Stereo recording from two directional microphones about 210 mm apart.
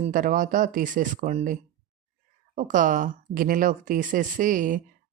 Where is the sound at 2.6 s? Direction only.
40° right (ahead or behind).